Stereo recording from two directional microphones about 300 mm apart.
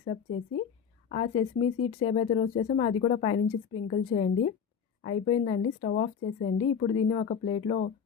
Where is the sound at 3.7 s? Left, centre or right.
Left.